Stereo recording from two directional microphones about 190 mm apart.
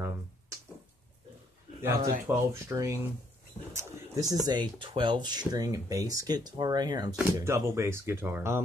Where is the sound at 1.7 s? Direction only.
15° right (ahead or behind).